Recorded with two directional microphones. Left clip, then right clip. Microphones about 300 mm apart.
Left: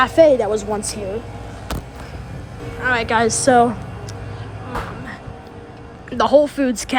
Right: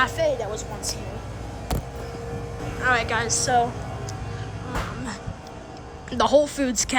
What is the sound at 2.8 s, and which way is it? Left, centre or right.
Speech, centre.